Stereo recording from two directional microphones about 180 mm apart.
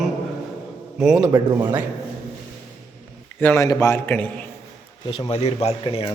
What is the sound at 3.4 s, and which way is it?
A man's voice, 15° left (ahead or behind).